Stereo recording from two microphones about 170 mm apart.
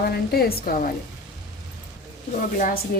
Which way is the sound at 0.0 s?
65° left (ahead or behind).